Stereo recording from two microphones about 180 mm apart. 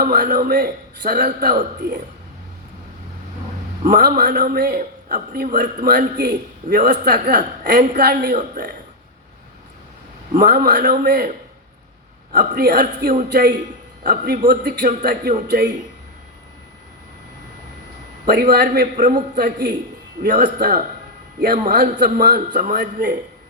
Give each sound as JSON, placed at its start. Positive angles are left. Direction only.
{"t": 0.0, "sound": "a man's voice", "side_deg": -50}
{"t": 3.8, "sound": "a man's voice", "side_deg": -50}
{"t": 6.9, "sound": "a man's voice", "side_deg": -60}
{"t": 10.3, "sound": "a man's voice", "side_deg": -50}
{"t": 12.3, "sound": "a man's voice", "side_deg": -55}
{"t": 15.4, "sound": "speech", "side_deg": -70}
{"t": 18.3, "sound": "a man's voice", "side_deg": -60}